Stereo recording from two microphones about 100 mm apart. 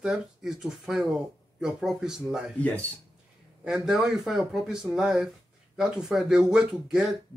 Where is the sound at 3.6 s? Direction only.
5° right (ahead or behind).